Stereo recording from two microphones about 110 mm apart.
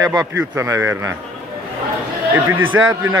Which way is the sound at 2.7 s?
25° right (ahead or behind).